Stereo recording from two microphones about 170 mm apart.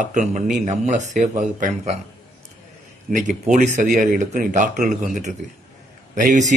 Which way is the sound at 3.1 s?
45° right (ahead or behind).